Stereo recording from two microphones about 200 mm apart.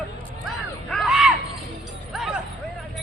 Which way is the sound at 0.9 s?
Centre (ahead or behind).